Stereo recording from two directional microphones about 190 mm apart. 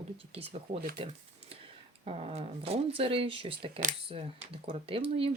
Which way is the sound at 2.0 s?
30° right (ahead or behind).